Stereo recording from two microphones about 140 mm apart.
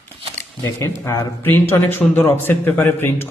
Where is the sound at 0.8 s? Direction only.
20° left (ahead or behind).